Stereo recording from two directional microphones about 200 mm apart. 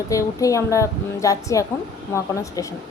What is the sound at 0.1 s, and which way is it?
A woman's voice, 15° left (ahead or behind).